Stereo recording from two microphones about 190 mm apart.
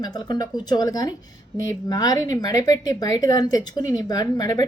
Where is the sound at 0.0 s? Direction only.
20° left (ahead or behind).